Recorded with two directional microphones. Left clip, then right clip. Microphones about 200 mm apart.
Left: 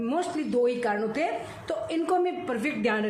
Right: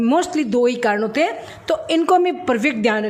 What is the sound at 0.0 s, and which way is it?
A woman's voice, 45° right (ahead or behind).